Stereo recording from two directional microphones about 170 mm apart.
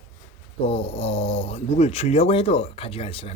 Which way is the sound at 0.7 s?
35° left (ahead or behind).